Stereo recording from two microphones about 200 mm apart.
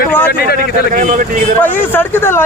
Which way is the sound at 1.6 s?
10° left (ahead or behind).